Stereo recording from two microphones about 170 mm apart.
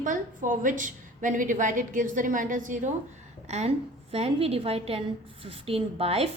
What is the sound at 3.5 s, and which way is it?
A woman's voice, 40° right (ahead or behind).